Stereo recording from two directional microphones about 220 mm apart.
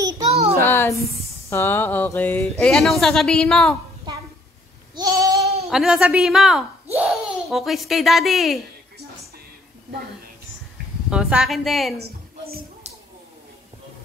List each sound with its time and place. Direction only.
0.3 s a sound: 30° right (ahead or behind)
0.6 s a sound: 10° left (ahead or behind)
2.6 s a woman's voice: centre (ahead or behind)
4.9 s goat: 15° right (ahead or behind)
5.7 s a child's voice: centre (ahead or behind)
11.1 s a woman's voice: 5° right (ahead or behind)